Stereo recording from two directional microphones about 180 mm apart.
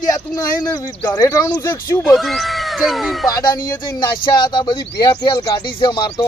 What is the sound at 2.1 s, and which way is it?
Speech, centre (ahead or behind).